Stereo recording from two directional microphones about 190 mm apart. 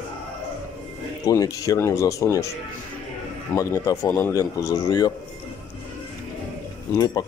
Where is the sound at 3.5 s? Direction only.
15° left (ahead or behind).